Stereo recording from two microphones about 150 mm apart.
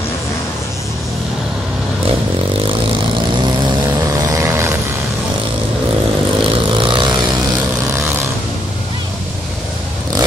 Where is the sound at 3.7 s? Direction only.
25° right (ahead or behind).